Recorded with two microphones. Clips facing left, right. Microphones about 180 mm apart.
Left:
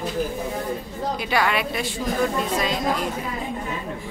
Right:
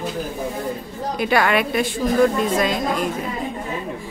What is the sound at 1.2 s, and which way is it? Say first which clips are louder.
Speech: right 6 dB; 55° right (ahead or behind).